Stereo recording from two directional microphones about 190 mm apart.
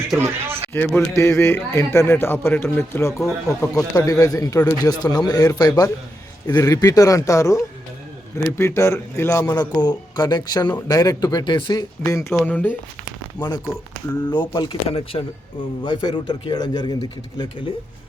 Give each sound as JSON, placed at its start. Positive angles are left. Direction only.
{"t": 0.7, "sound": "speech", "side_deg": 10}
{"t": 3.1, "sound": "speech", "side_deg": 0}
{"t": 3.6, "sound": "a man's voice", "side_deg": 15}
{"t": 13.4, "sound": "a man's voice", "side_deg": 20}